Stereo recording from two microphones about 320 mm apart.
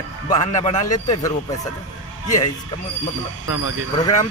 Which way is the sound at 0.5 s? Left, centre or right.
Left.